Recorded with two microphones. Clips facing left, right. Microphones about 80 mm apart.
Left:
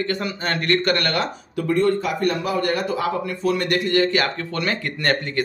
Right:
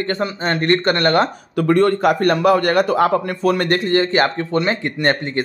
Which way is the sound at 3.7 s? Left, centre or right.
Right.